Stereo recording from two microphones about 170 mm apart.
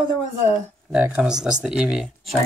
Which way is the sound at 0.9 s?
5° right (ahead or behind).